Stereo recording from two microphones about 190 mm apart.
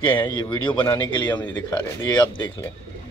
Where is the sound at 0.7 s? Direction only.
10° left (ahead or behind).